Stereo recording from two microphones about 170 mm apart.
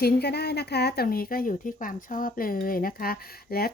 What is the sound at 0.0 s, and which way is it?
Speech, 70° left (ahead or behind).